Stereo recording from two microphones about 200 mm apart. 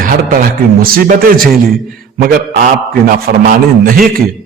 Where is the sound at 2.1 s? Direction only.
50° right (ahead or behind).